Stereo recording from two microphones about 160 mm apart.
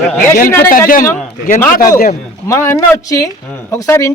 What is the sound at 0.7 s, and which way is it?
Speech, 60° left (ahead or behind).